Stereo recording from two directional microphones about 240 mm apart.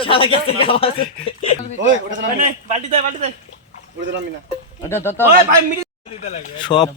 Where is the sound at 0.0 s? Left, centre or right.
Left.